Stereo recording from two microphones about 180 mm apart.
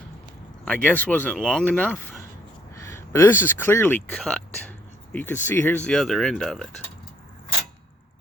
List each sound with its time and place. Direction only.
0.6 s speech: 10° left (ahead or behind)
2.8 s a sound: 15° left (ahead or behind)
3.6 s speech: 15° left (ahead or behind)